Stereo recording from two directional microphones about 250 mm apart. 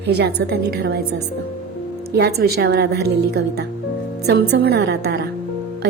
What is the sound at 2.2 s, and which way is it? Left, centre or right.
A woman's voice, right.